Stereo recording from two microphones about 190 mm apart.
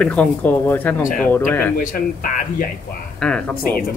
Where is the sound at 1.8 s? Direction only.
45° left (ahead or behind).